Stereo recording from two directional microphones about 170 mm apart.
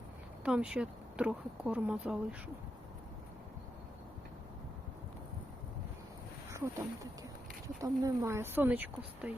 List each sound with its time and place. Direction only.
0.4 s speech: 5° right (ahead or behind)
6.5 s speech: 20° right (ahead or behind)